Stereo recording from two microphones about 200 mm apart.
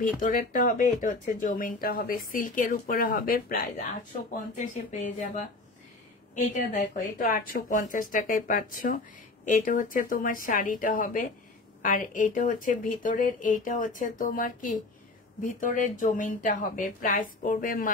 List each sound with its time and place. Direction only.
0.0 s speech: 40° left (ahead or behind)